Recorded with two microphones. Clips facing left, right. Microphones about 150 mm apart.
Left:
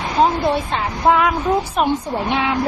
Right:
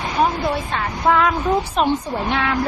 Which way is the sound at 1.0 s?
15° left (ahead or behind).